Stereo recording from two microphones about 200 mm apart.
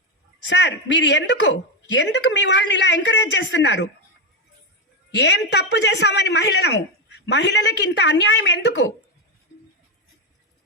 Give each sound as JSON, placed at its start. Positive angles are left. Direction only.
{"t": 0.4, "sound": "a woman's voice", "side_deg": 65}
{"t": 5.1, "sound": "a woman's voice", "side_deg": 60}